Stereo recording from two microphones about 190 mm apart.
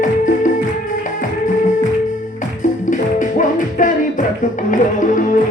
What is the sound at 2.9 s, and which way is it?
Music, 40° left (ahead or behind).